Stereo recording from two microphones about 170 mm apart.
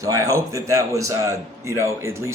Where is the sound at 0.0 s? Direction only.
20° right (ahead or behind).